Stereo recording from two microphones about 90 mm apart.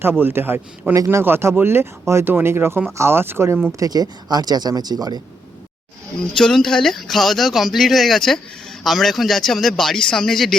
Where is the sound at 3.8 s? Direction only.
45° right (ahead or behind).